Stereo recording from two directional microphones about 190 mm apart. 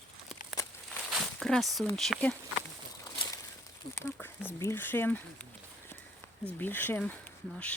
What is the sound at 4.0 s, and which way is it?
Speech, 10° left (ahead or behind).